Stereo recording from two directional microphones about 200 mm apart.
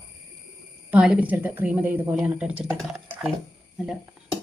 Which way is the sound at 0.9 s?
5° right (ahead or behind).